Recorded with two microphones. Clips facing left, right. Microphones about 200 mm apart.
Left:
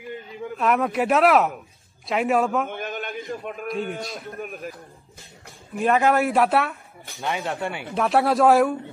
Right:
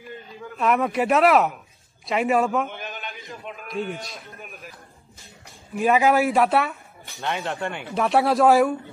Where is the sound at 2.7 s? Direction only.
55° left (ahead or behind).